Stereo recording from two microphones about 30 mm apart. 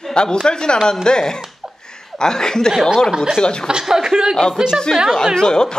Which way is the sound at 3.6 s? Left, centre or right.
Right.